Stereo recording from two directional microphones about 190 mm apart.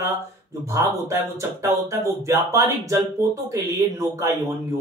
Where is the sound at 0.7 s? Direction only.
15° right (ahead or behind).